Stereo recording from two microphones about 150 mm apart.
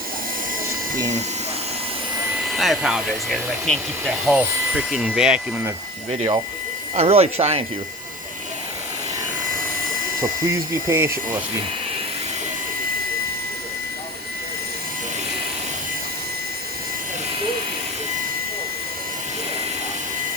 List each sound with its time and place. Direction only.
0.9 s speech: 55° right (ahead or behind)
2.5 s speech: centre (ahead or behind)
4.3 s speech: 10° right (ahead or behind)
6.9 s speech: 40° right (ahead or behind)
10.4 s speech: 20° right (ahead or behind)